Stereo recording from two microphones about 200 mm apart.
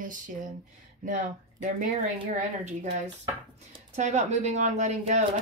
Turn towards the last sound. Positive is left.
turn(degrees=-35)  # may be behind; listen again after turning